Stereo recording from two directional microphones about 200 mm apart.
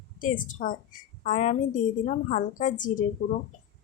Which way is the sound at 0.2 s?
40° left (ahead or behind).